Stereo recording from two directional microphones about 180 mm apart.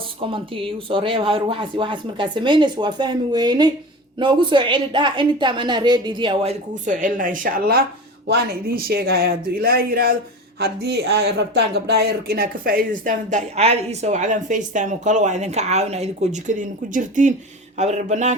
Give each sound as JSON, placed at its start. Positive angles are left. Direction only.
{"t": 0.2, "sound": "speech", "side_deg": -30}
{"t": 6.8, "sound": "speech", "side_deg": -45}